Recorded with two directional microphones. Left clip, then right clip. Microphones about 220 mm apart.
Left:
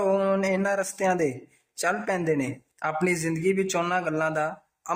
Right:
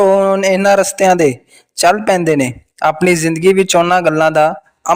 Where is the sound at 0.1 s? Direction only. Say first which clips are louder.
Right 13 dB; 35° right (ahead or behind).